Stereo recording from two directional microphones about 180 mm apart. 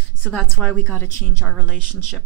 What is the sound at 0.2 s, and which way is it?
A woman's voice, centre (ahead or behind).